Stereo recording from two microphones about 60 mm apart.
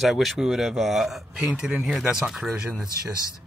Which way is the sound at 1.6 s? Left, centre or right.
Centre.